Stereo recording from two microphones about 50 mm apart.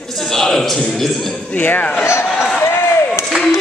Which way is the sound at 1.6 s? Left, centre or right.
Left.